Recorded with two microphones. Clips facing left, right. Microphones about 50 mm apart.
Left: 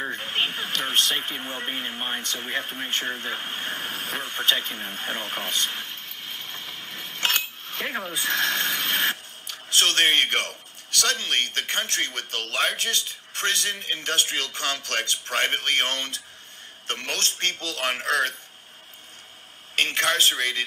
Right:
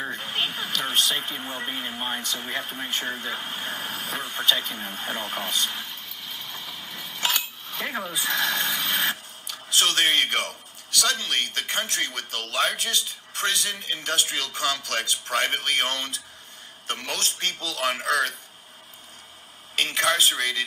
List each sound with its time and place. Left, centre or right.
0.1 s radio: left
1.1 s speech: left
1.4 s speech: left
3.2 s a sound: left
8.1 s a man's voice: left
19.7 s a man's voice: left